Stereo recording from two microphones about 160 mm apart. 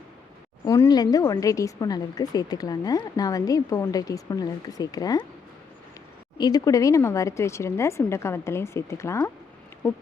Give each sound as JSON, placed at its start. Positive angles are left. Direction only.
{"t": 0.6, "sound": "speech", "side_deg": 20}
{"t": 6.4, "sound": "speech", "side_deg": 25}